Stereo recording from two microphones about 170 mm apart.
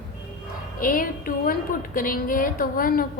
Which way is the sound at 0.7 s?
55° left (ahead or behind).